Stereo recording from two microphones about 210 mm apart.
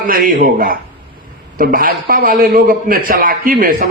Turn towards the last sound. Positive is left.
turn(degrees=-40)  # may be behind; listen again after turning